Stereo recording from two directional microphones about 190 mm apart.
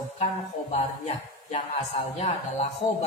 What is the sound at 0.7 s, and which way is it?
Speech, 35° left (ahead or behind).